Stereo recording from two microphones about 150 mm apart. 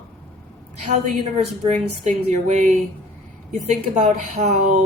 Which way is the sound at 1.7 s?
55° right (ahead or behind).